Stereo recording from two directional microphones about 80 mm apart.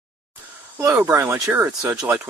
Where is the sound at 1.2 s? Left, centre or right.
Right.